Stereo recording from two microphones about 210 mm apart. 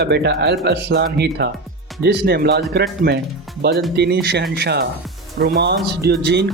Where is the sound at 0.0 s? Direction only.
55° right (ahead or behind).